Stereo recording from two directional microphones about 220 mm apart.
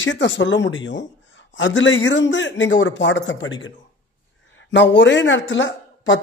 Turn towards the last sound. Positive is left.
turn(degrees=55)  # may be behind; listen again after turning